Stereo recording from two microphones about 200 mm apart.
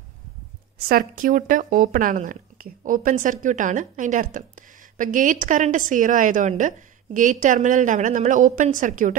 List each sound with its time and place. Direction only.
0.7 s speech: 45° right (ahead or behind)